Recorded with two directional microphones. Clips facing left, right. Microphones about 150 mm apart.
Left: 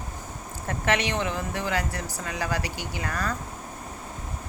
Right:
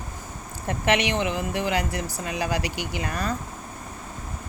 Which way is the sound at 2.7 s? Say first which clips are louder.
Right 4 dB; 90° right.